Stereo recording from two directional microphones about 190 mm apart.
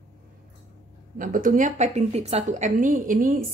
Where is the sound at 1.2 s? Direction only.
45° right (ahead or behind).